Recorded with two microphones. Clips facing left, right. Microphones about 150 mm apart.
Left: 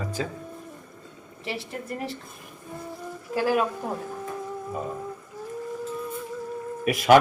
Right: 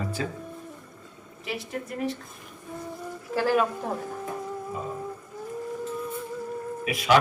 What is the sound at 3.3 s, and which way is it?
Speech, 10° left (ahead or behind).